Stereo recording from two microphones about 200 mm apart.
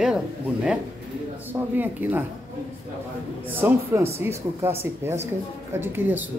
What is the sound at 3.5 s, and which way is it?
A man's voice, 10° right (ahead or behind).